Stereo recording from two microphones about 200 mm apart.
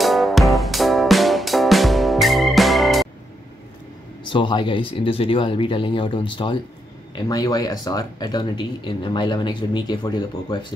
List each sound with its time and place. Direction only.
0.0 s music: centre (ahead or behind)
4.3 s speech: 25° left (ahead or behind)